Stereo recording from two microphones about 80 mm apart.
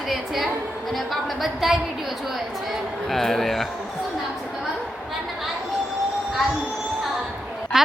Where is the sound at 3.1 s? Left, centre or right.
Centre.